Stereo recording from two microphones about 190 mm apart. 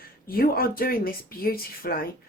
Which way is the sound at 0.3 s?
50° left (ahead or behind).